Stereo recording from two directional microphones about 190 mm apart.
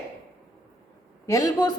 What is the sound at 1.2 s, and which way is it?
Speech, 15° left (ahead or behind).